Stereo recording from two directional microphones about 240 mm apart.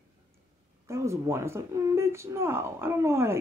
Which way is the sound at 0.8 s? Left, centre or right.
Centre.